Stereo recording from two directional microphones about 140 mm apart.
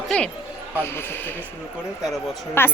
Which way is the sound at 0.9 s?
15° left (ahead or behind).